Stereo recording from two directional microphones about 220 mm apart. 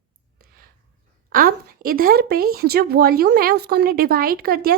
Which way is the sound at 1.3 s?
40° right (ahead or behind).